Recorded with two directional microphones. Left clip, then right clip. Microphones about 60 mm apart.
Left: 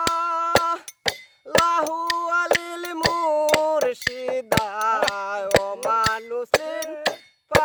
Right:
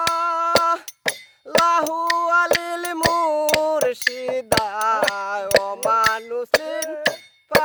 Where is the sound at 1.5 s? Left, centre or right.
Right.